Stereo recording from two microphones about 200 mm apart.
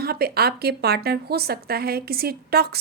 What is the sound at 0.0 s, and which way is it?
Speech, 50° right (ahead or behind).